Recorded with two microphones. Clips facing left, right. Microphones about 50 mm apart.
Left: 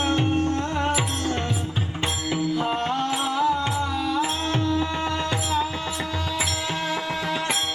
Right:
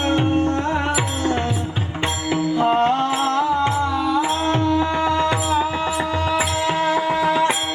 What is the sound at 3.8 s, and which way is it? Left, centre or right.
Music, right.